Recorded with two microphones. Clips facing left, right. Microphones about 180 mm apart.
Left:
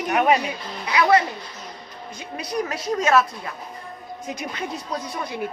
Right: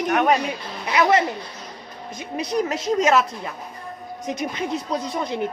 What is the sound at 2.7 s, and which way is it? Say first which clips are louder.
Speech: even; 20° right (ahead or behind).